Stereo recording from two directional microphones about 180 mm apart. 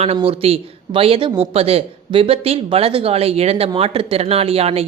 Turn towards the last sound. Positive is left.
turn(degrees=-35)  # may be behind; listen again after turning